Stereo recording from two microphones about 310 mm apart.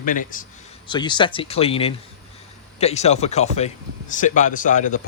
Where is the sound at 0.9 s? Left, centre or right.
Centre.